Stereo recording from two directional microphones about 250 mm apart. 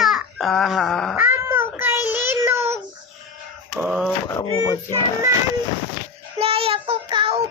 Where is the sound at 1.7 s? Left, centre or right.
Centre.